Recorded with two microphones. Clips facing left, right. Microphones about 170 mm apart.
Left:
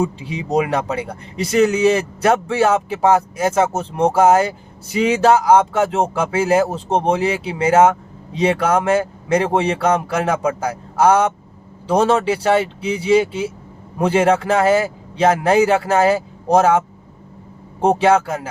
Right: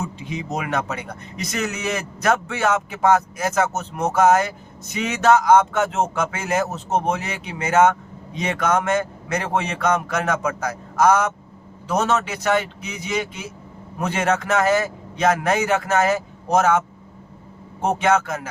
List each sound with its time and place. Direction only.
0.3 s speech: 35° left (ahead or behind)